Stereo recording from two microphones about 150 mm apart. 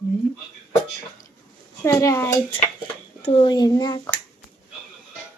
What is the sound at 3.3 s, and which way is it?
Speech, 30° left (ahead or behind).